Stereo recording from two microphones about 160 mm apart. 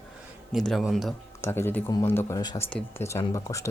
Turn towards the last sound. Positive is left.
turn(degrees=20)  # may be behind; listen again after turning